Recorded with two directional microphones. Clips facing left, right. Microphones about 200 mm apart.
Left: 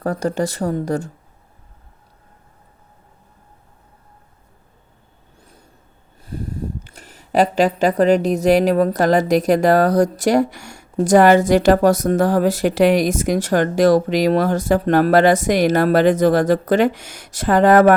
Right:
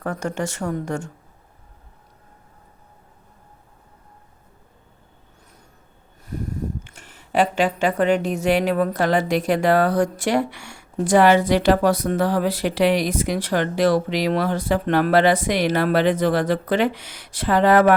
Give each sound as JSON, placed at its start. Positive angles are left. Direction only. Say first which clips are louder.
{"t": 0.0, "sound": "speech", "louder": "left 5 dB", "side_deg": 35}
{"t": 6.2, "sound": "speech", "louder": "left 1 dB", "side_deg": 30}